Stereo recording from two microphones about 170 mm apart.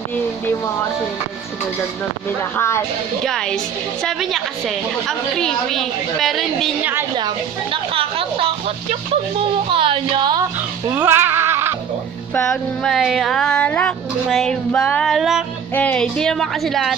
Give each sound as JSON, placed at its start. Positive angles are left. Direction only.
{"t": 2.5, "sound": "speech", "side_deg": 15}
{"t": 3.3, "sound": "a woman's voice", "side_deg": 5}
{"t": 6.8, "sound": "a woman's voice", "side_deg": -10}
{"t": 7.2, "sound": "a woman's voice", "side_deg": -30}
{"t": 10.9, "sound": "a sound", "side_deg": -10}
{"t": 12.4, "sound": "a woman's voice", "side_deg": 5}